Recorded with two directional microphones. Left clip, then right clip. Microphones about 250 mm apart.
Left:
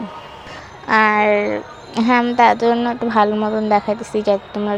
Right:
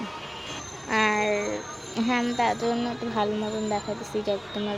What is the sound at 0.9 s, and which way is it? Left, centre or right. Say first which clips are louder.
A woman's voice: left 10 dB; centre.